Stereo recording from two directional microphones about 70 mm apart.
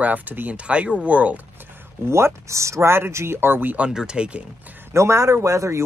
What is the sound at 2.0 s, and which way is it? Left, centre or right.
Speech, right.